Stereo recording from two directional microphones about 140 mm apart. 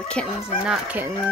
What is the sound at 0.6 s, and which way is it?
Speech, 10° right (ahead or behind).